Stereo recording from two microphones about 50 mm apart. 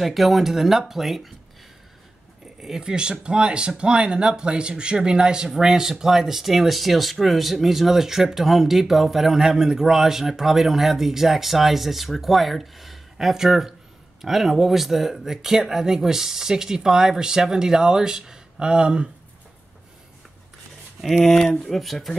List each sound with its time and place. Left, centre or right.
0.0 s speech: centre
2.6 s speech: centre
21.0 s speech: centre